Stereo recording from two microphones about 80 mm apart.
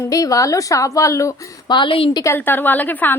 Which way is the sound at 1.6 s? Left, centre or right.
Left.